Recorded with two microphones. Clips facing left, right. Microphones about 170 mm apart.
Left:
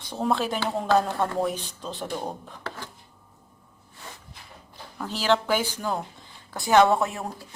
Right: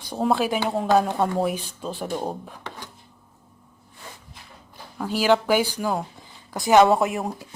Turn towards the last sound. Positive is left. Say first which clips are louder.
# right 4 dB
turn(degrees=-20)  # may be behind; listen again after turning